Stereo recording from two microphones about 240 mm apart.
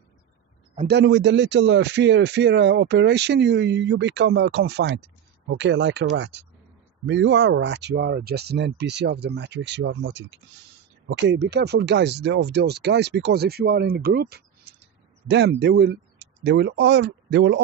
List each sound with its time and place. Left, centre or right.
0.8 s speech: right